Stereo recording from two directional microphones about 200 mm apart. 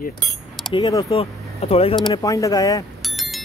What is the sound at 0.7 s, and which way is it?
Speech, 25° left (ahead or behind).